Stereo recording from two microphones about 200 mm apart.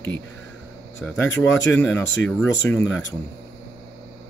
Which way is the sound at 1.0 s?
5° left (ahead or behind).